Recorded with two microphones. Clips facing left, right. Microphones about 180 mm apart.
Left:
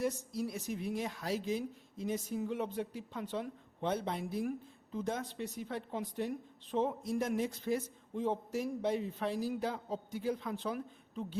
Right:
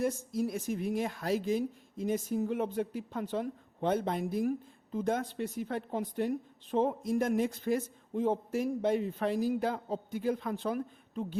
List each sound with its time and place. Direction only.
0.0 s a woman's voice: 50° right (ahead or behind)